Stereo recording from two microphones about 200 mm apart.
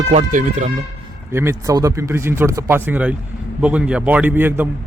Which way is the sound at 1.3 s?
10° right (ahead or behind).